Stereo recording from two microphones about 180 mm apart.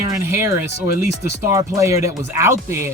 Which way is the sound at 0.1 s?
15° right (ahead or behind).